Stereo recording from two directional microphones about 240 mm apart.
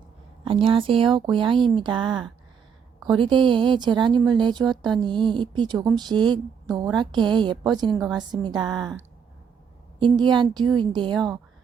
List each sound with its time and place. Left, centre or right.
0.4 s speech: right
7.9 s a woman's voice: centre
8.4 s speech: centre
10.0 s speech: centre